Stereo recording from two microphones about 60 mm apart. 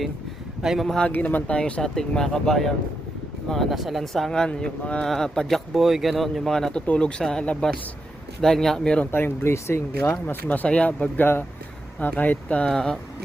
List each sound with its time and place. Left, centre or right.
0.6 s speech: centre
1.0 s speech: left
5.0 s speech: centre
6.8 s speech: centre
8.4 s speech: centre
9.1 s speech: left
10.2 s speech: left
12.6 s speech: centre